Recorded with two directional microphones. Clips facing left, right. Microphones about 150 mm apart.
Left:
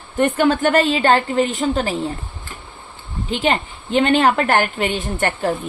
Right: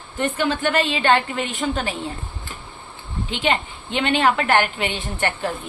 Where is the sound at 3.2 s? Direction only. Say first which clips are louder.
Left 3 dB; 40° left (ahead or behind).